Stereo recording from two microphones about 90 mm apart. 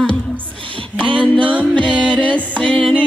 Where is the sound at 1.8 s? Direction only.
65° right (ahead or behind).